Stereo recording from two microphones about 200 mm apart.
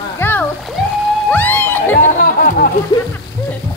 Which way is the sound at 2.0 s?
40° left (ahead or behind).